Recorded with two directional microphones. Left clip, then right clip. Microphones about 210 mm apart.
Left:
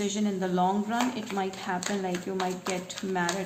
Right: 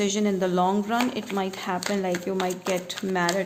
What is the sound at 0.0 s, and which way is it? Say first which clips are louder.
A woman's voice: right 6 dB; 50° right (ahead or behind).